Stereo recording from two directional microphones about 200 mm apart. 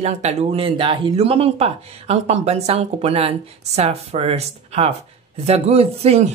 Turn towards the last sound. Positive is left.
turn(degrees=-30)  # may be behind; listen again after turning